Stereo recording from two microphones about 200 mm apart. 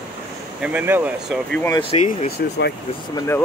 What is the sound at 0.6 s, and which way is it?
Speech, 10° right (ahead or behind).